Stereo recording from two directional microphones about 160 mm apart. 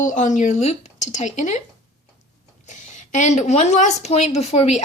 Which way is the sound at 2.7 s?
50° left (ahead or behind).